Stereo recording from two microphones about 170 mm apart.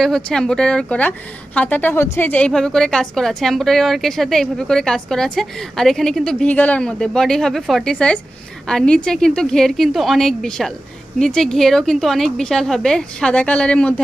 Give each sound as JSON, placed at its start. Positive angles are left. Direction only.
{"t": 0.0, "sound": "a woman's voice", "side_deg": 5}